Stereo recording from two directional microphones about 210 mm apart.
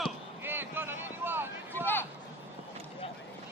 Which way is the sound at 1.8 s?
10° left (ahead or behind).